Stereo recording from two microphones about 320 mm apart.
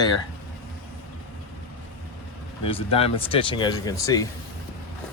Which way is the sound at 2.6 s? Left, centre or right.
Centre.